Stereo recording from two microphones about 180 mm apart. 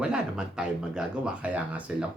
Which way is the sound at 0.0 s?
5° right (ahead or behind).